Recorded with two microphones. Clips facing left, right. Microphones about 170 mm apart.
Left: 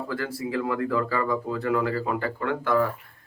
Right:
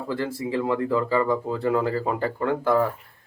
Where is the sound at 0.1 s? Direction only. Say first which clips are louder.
Right 4 dB; 25° right (ahead or behind).